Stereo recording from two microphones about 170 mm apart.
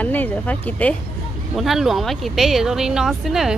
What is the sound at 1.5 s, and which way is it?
Speech, centre (ahead or behind).